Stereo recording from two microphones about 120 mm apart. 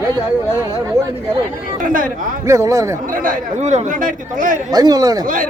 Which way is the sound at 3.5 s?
75° right (ahead or behind).